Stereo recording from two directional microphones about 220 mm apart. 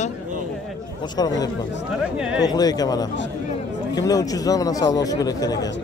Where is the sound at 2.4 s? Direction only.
15° left (ahead or behind).